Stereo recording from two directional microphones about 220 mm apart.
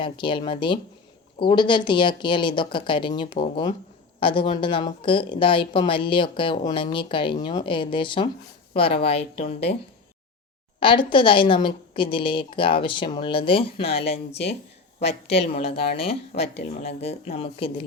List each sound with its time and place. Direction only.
0.0 s a woman's voice: 25° left (ahead or behind)
10.8 s a woman's voice: 25° left (ahead or behind)